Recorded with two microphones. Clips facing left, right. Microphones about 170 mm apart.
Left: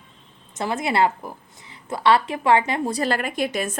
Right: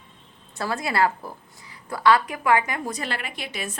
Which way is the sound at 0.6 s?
20° left (ahead or behind).